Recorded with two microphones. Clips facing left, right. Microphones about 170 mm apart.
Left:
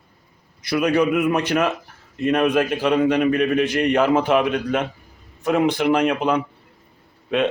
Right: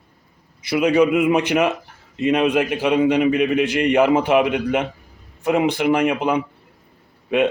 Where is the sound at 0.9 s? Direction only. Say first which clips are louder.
Right 4 dB; 15° right (ahead or behind).